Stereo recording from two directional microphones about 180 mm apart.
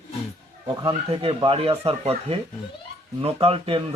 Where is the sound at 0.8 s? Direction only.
30° right (ahead or behind).